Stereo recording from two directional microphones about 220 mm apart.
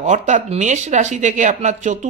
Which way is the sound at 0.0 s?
35° right (ahead or behind).